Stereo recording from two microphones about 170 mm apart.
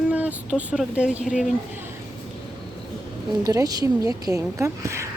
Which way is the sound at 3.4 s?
20° right (ahead or behind).